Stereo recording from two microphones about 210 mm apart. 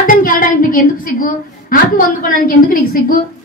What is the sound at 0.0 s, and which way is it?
A woman's voice, 40° left (ahead or behind).